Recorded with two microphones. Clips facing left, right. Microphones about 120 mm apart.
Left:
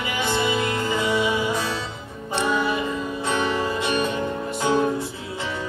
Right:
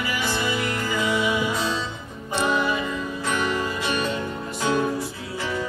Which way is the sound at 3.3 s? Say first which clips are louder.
Left 2 dB; 20° left (ahead or behind).